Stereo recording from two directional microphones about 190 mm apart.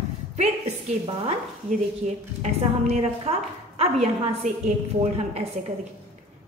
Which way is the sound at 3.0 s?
30° right (ahead or behind).